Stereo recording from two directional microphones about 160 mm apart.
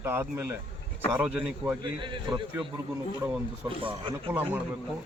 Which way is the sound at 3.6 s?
30° right (ahead or behind).